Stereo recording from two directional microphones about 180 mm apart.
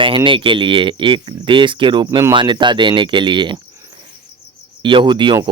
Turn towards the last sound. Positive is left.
turn(degrees=-25)  # may be behind; listen again after turning